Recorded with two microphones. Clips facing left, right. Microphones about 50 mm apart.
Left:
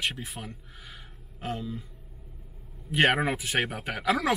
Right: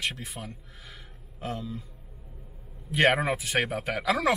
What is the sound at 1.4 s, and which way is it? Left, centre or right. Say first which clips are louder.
Speech: left 1 dB; left.